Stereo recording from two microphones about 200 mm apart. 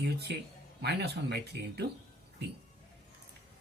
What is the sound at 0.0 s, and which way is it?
A man's voice, 55° right (ahead or behind).